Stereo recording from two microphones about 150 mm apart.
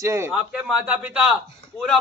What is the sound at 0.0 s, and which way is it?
A man's voice, 20° right (ahead or behind).